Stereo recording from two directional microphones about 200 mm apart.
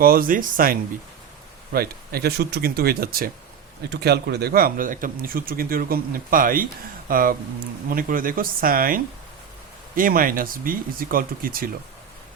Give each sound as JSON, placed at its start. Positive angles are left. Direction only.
{"t": 0.0, "sound": "speech", "side_deg": -45}